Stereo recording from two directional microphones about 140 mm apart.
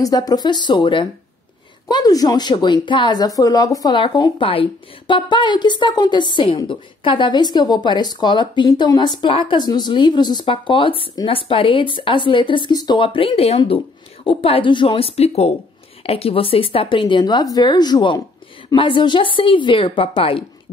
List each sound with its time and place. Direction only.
0.0 s a woman's voice: 25° left (ahead or behind)